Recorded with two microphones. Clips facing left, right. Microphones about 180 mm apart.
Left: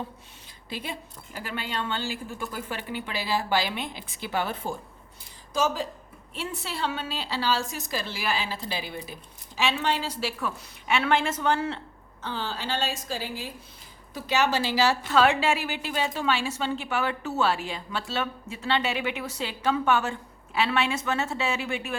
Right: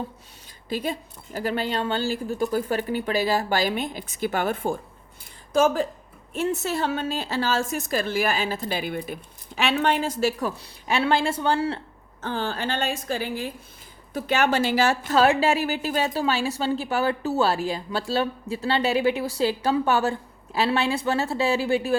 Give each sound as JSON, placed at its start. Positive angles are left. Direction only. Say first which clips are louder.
{"t": 0.7, "sound": "a woman's voice", "louder": "right 8 dB", "side_deg": -45}
{"t": 12.2, "sound": "a woman's voice", "louder": "right 5 dB", "side_deg": -50}